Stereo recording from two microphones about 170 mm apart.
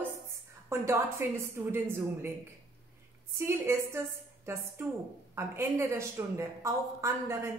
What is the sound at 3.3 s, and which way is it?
Speech, 15° right (ahead or behind).